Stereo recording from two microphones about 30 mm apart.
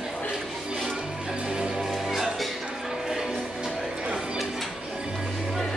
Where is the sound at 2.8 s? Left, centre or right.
Centre.